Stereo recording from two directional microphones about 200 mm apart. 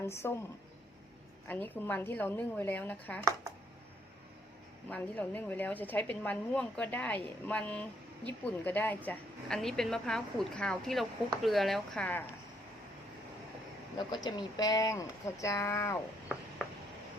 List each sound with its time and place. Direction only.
0.0 s a woman's voice: 10° left (ahead or behind)
1.5 s a woman's voice: 10° left (ahead or behind)
4.9 s a woman's voice: 5° left (ahead or behind)
14.1 s a woman's voice: 20° left (ahead or behind)